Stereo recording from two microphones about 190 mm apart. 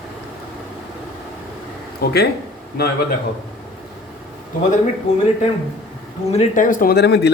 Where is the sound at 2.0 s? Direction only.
55° left (ahead or behind).